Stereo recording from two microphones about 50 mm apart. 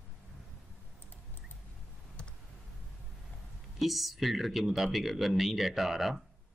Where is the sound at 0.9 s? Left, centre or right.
Left.